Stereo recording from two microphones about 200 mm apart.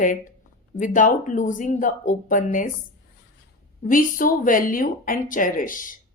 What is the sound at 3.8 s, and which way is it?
Speech, 45° left (ahead or behind).